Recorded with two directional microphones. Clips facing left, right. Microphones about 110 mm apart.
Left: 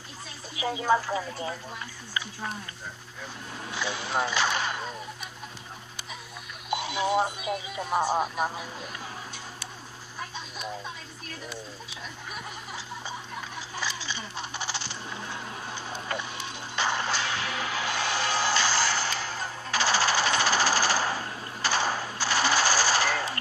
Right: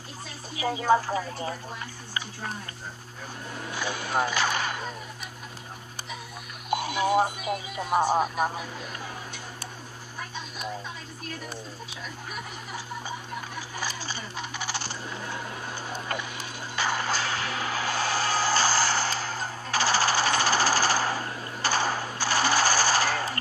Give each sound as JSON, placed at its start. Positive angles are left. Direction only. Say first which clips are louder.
{"t": 0.6, "sound": "a woman's voice", "louder": "right 2 dB", "side_deg": -40}
{"t": 3.7, "sound": "speech", "louder": "right 1 dB", "side_deg": -45}
{"t": 6.7, "sound": "alarm clock", "louder": "right 2 dB", "side_deg": -45}
{"t": 7.9, "sound": "speech", "louder": "right 3 dB", "side_deg": -15}
{"t": 13.7, "sound": "coin", "louder": "left 1 dB", "side_deg": -45}
{"t": 15.7, "sound": "a sound", "louder": "even", "side_deg": -45}
{"t": 16.4, "sound": "music", "louder": "even", "side_deg": -45}